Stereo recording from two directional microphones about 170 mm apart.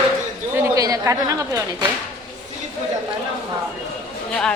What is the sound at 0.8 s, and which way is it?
Speech, 20° right (ahead or behind).